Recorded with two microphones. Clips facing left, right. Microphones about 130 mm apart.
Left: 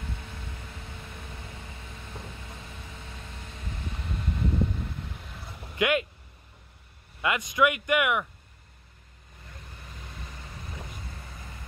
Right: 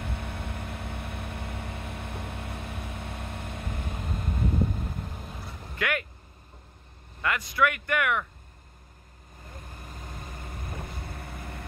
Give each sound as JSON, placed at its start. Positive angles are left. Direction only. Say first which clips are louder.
{"t": 0.0, "sound": "vehicle", "louder": "right 5 dB", "side_deg": -60}
{"t": 5.8, "sound": "speech", "louder": "left 5 dB", "side_deg": 20}
{"t": 7.2, "sound": "speech", "louder": "left 1 dB", "side_deg": 20}
{"t": 9.5, "sound": "vehicle", "louder": "right 3 dB", "side_deg": -45}